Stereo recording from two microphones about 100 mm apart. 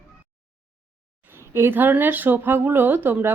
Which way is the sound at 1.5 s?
20° right (ahead or behind).